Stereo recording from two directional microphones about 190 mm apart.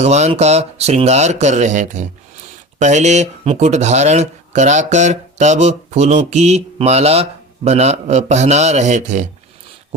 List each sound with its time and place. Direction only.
0.0 s speech: 35° right (ahead or behind)